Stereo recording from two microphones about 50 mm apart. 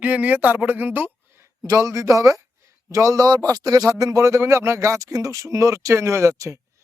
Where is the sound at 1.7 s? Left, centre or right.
Right.